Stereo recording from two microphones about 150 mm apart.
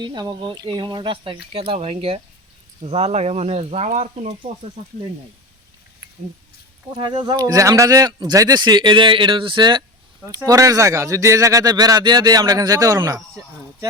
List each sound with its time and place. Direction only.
0.0 s speech: 30° right (ahead or behind); by 4.5 s 50° right (ahead or behind)
6.9 s a man's voice: 35° right (ahead or behind)